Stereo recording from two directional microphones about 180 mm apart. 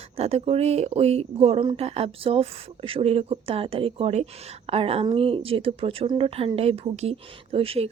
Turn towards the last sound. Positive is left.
turn(degrees=-30)  # may be behind; listen again after turning